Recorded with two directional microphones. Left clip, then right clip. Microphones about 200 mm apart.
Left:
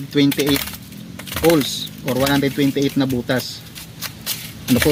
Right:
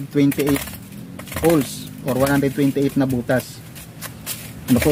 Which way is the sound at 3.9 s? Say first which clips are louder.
Left 5 dB; 15° right (ahead or behind).